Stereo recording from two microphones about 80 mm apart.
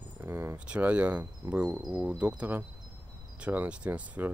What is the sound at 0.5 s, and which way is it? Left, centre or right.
Speech, centre.